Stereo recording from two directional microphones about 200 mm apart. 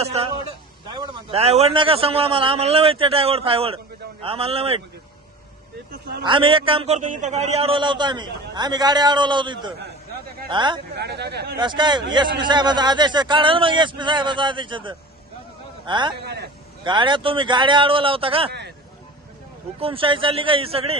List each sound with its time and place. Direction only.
0.0 s a man's voice: 30° right (ahead or behind)
6.2 s a man's voice: 25° right (ahead or behind)
10.9 s speech: 55° right (ahead or behind)
11.5 s a man's voice: 20° right (ahead or behind)
16.2 s speech: 55° right (ahead or behind)
16.8 s a man's voice: 25° right (ahead or behind)
19.8 s a man's voice: 25° right (ahead or behind)